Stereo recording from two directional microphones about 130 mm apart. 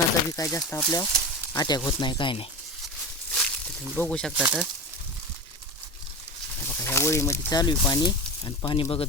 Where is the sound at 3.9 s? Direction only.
5° left (ahead or behind).